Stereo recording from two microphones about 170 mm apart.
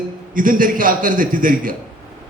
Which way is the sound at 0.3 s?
55° right (ahead or behind).